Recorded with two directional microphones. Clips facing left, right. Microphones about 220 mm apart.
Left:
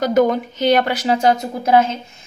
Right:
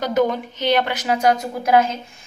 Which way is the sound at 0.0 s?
45° left (ahead or behind).